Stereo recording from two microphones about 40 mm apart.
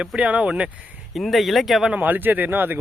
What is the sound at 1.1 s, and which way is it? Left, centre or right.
Speech, centre.